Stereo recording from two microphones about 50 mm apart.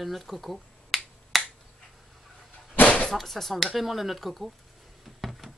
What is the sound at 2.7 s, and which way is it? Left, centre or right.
Slam, left.